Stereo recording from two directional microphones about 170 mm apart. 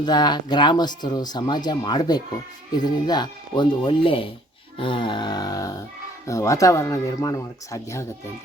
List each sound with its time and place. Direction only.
0.0 s speech: 25° left (ahead or behind)